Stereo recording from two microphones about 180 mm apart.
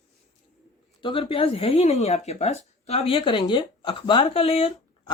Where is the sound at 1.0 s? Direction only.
30° left (ahead or behind).